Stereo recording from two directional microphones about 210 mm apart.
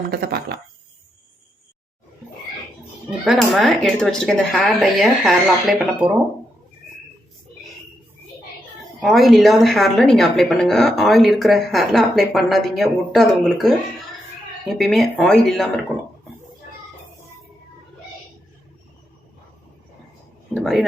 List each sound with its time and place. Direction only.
0.1 s speech: 50° right (ahead or behind)
3.2 s a woman's voice: centre (ahead or behind)
9.0 s a woman's voice: centre (ahead or behind)
20.6 s a woman's voice: centre (ahead or behind)